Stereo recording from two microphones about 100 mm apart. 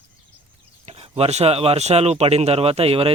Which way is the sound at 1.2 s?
85° right.